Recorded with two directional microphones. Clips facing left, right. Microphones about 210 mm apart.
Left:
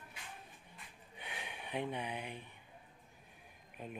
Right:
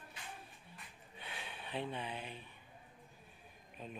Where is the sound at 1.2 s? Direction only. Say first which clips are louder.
Left 1 dB; 15° left (ahead or behind).